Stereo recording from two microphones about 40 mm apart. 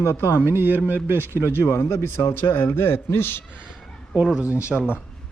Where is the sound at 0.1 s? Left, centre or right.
Left.